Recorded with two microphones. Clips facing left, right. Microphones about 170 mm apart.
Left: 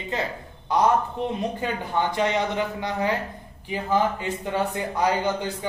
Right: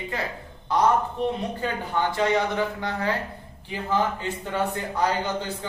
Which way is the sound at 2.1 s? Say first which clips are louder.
Right 3 dB; 20° left (ahead or behind).